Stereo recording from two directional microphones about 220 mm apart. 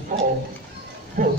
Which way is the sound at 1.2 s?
40° right (ahead or behind).